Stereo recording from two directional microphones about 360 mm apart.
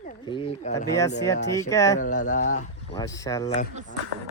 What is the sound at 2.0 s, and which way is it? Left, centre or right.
Speech, left.